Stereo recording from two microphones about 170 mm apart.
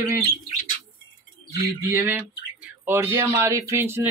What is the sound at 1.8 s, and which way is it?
Speech, 10° right (ahead or behind).